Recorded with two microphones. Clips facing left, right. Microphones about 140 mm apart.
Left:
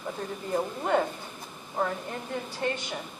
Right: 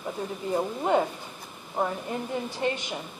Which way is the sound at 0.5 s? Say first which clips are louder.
Right 2 dB; 15° right (ahead or behind).